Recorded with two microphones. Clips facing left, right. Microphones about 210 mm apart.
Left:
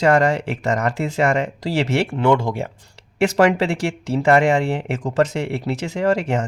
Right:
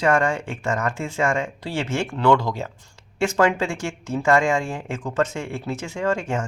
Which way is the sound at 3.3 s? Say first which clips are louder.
Left 4 dB; 35° left (ahead or behind).